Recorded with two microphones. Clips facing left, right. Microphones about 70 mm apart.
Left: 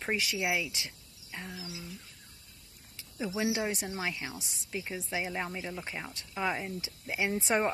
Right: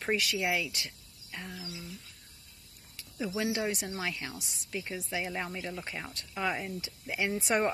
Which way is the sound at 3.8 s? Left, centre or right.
Centre.